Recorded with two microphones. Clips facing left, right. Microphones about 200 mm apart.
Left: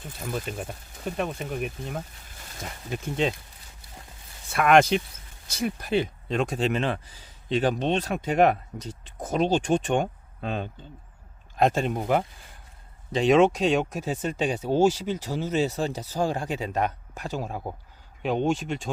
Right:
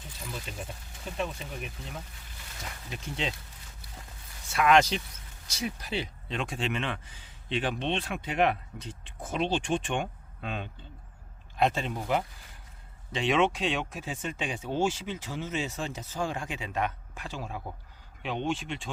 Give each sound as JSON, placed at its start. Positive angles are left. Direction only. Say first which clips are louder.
{"t": 0.0, "sound": "speech", "louder": "left 8 dB", "side_deg": 55}
{"t": 4.4, "sound": "speech", "louder": "left 4 dB", "side_deg": 55}
{"t": 13.1, "sound": "speech", "louder": "left 7 dB", "side_deg": 40}